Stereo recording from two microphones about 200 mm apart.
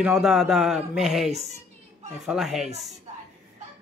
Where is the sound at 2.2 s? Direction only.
Centre (ahead or behind).